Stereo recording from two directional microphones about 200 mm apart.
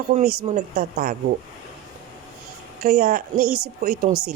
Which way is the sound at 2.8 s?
50° right (ahead or behind).